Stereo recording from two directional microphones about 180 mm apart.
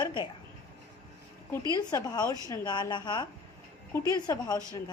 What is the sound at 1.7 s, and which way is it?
A woman's voice, 25° left (ahead or behind).